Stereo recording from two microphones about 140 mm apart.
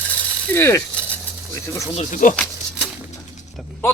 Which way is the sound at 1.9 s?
60° left (ahead or behind).